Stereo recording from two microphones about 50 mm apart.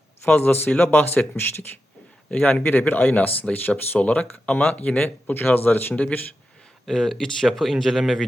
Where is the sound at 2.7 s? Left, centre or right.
Left.